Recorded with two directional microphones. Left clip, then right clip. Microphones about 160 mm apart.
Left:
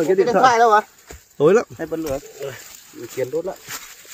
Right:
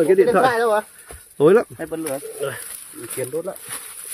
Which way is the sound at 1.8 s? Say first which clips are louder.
Left 2 dB; 20° left (ahead or behind).